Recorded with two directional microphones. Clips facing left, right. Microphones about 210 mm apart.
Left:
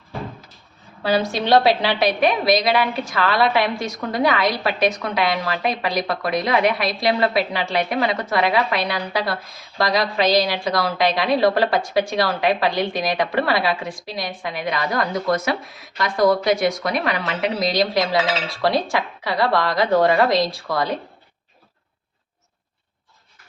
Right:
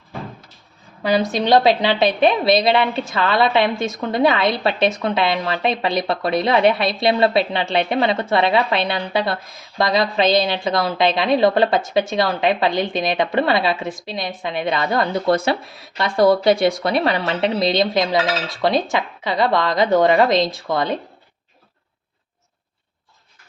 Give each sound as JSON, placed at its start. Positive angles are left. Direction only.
{"t": 1.0, "sound": "a woman's voice", "side_deg": -20}